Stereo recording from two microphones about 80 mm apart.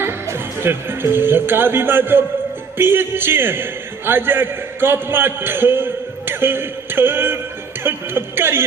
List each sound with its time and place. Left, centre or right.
0.0 s a man's voice: right